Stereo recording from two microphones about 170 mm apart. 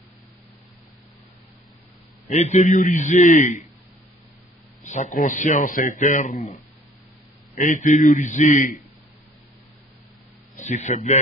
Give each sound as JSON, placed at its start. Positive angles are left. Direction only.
{"t": 2.2, "sound": "speech", "side_deg": 45}
{"t": 4.8, "sound": "speech", "side_deg": 45}
{"t": 10.5, "sound": "a man's voice", "side_deg": 45}